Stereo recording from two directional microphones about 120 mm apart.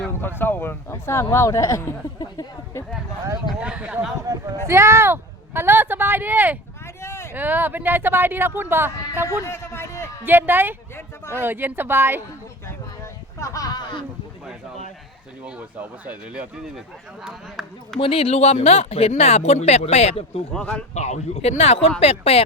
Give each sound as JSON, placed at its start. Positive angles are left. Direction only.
{"t": 0.2, "sound": "speech", "side_deg": 20}
{"t": 3.6, "sound": "speech", "side_deg": -10}
{"t": 4.6, "sound": "speech", "side_deg": -25}
{"t": 7.0, "sound": "a sound", "side_deg": 20}
{"t": 7.3, "sound": "speech", "side_deg": -15}
{"t": 9.2, "sound": "a man's voice", "side_deg": 20}
{"t": 10.2, "sound": "speech", "side_deg": -15}
{"t": 12.6, "sound": "a sound", "side_deg": 25}
{"t": 15.4, "sound": "speech", "side_deg": -10}
{"t": 18.0, "sound": "speech", "side_deg": 50}
{"t": 20.5, "sound": "speech", "side_deg": 5}
{"t": 20.9, "sound": "speech", "side_deg": 65}